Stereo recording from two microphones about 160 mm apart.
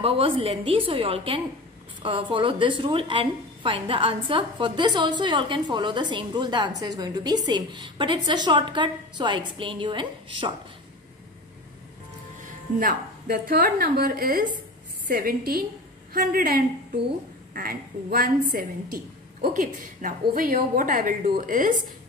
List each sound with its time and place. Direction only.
0.0 s a woman's voice: 35° right (ahead or behind)
12.7 s a woman's voice: 65° right (ahead or behind)